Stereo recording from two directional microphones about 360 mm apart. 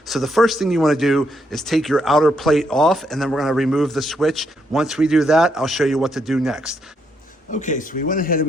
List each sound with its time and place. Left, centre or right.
0.1 s a man's voice: centre
7.5 s speech: left